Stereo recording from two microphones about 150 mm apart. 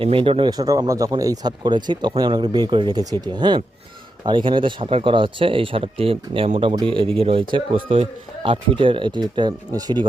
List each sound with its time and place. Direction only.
0.0 s speech: 40° right (ahead or behind)